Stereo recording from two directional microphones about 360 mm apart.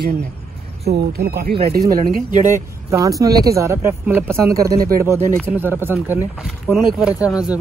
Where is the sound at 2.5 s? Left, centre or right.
Centre.